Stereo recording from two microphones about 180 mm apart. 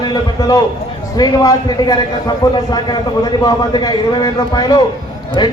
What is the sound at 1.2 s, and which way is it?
A man's voice, 20° left (ahead or behind).